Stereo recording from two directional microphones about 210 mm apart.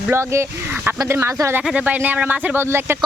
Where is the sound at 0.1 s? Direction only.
10° right (ahead or behind).